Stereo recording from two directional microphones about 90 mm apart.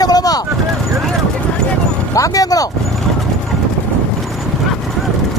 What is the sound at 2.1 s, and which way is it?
Speech, 40° left (ahead or behind).